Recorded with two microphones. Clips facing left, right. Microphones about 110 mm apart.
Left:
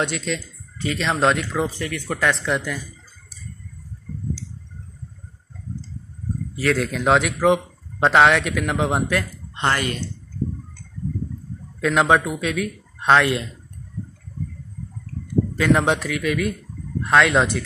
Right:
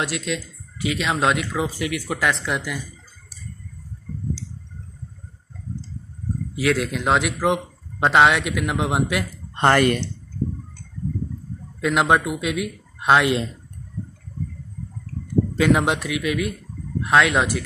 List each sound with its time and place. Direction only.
0.0 s a man's voice: 5° right (ahead or behind)
6.7 s a man's voice: 5° right (ahead or behind)
9.6 s speech: 55° right (ahead or behind)
11.8 s speech: 5° right (ahead or behind)
15.7 s a man's voice: 5° right (ahead or behind)